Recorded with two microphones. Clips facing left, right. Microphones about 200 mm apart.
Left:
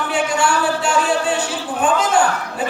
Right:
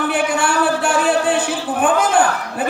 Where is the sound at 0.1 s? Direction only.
55° right (ahead or behind).